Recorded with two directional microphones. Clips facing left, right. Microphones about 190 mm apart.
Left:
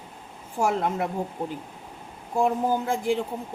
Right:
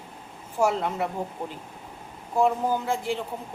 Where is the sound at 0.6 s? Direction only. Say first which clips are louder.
Even; 45° left (ahead or behind).